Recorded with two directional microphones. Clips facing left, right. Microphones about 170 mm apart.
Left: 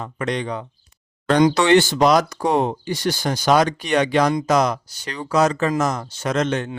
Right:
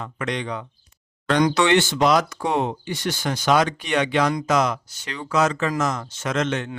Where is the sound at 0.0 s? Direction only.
35° left (ahead or behind).